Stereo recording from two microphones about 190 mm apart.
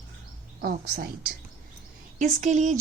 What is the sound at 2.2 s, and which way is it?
Speech, 40° right (ahead or behind).